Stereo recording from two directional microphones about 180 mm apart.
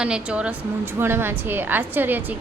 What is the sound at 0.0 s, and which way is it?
A woman's voice, 5° right (ahead or behind).